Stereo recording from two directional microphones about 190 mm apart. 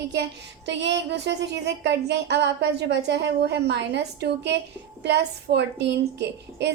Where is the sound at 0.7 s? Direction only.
70° right (ahead or behind).